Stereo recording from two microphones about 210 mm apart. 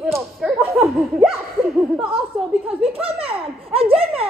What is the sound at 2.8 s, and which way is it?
Speech, 25° right (ahead or behind).